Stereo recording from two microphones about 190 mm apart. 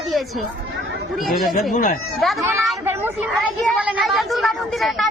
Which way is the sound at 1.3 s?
Centre (ahead or behind).